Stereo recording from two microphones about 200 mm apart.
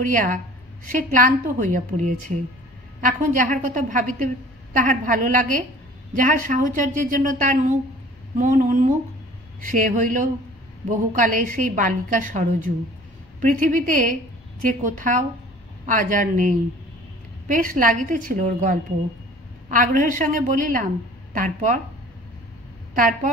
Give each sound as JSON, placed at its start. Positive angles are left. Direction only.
{"t": 0.0, "sound": "a woman's voice", "side_deg": -40}
{"t": 22.9, "sound": "a woman's voice", "side_deg": -40}